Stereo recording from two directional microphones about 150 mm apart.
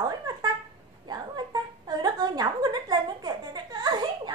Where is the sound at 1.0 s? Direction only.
30° right (ahead or behind).